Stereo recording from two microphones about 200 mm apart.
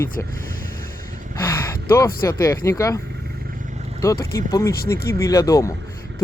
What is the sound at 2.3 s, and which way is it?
Speech, 15° left (ahead or behind).